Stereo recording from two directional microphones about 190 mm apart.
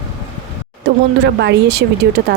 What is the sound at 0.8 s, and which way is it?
Speech, 65° right (ahead or behind).